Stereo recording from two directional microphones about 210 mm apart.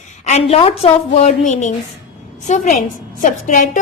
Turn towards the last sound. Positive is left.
turn(degrees=35)  # may be behind; listen again after turning